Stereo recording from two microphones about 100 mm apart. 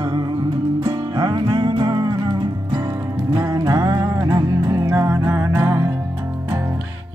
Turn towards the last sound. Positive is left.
turn(degrees=-25)  # may be behind; listen again after turning